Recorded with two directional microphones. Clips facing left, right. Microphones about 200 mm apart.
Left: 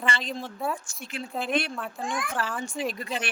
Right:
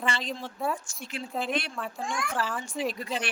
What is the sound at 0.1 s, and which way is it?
Speech, 55° left (ahead or behind).